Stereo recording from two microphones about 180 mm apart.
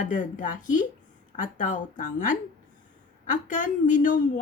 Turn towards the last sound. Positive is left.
turn(degrees=45)  # may be behind; listen again after turning